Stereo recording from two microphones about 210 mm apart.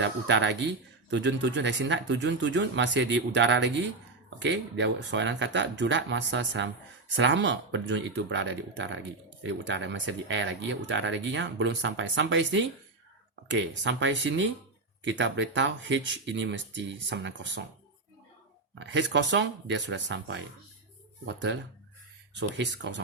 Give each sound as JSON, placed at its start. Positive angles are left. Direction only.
{"t": 0.0, "sound": "speech", "side_deg": -60}
{"t": 18.7, "sound": "speech", "side_deg": -60}